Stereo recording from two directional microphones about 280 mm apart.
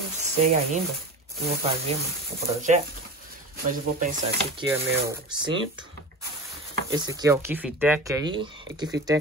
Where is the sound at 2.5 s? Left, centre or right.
Right.